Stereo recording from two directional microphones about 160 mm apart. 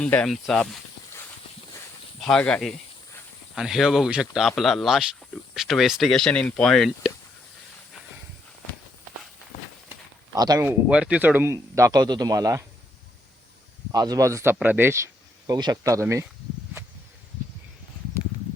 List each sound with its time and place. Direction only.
0.0 s speech: 5° left (ahead or behind)
2.2 s speech: 5° left (ahead or behind)
10.3 s speech: 25° right (ahead or behind)
10.7 s speech: 5° right (ahead or behind)
13.9 s speech: 25° right (ahead or behind)
16.8 s a sound: 15° right (ahead or behind)